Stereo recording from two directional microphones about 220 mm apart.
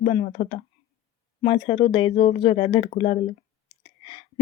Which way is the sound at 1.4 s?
25° left (ahead or behind).